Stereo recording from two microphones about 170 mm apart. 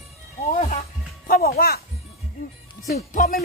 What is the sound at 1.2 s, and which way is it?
Speech, 60° left (ahead or behind).